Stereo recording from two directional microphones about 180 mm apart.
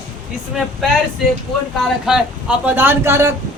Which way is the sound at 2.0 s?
5° right (ahead or behind).